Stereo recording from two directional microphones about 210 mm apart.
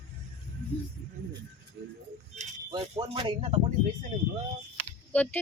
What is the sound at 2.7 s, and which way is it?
Speech, 20° right (ahead or behind).